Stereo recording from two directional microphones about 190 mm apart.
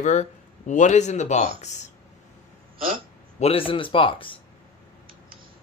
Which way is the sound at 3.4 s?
30° left (ahead or behind).